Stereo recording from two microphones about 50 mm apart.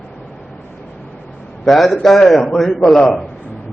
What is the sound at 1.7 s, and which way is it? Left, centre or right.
A man's voice, centre.